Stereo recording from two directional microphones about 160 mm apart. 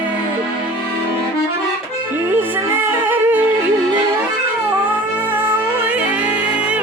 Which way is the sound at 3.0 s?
10° right (ahead or behind).